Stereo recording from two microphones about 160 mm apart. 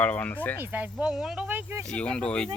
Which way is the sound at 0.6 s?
10° right (ahead or behind).